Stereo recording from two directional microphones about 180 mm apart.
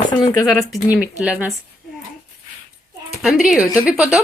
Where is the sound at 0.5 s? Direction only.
Centre (ahead or behind).